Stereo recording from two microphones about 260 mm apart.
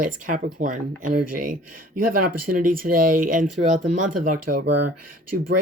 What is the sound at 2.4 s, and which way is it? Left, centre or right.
Speech, right.